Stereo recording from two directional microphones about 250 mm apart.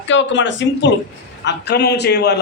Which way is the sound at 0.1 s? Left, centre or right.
Left.